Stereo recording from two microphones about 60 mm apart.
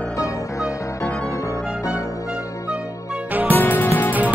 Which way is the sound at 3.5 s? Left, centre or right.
Left.